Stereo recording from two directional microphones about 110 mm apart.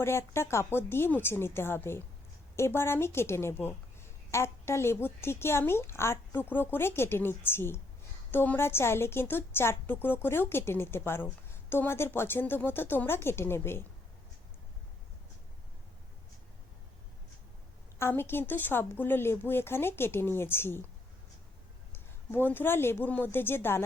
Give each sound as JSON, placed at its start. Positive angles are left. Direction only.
{"t": 0.0, "sound": "a woman's voice", "side_deg": 25}
{"t": 18.0, "sound": "a woman's voice", "side_deg": 20}
{"t": 21.9, "sound": "speech", "side_deg": 20}